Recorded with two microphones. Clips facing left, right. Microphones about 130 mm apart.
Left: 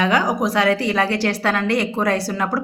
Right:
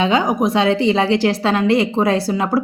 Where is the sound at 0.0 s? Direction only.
25° right (ahead or behind).